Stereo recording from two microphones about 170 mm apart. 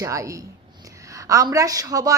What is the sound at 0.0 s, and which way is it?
A woman's voice, 20° right (ahead or behind).